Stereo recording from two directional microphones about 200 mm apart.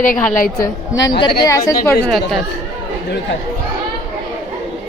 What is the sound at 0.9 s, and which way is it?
Speech, 20° left (ahead or behind).